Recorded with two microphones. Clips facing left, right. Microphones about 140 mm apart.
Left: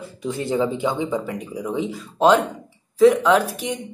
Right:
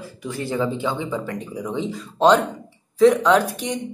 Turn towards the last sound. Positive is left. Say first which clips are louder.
# even
turn(degrees=0)  # may be behind; listen again after turning